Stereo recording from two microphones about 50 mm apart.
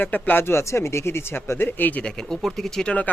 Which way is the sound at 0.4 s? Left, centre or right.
Left.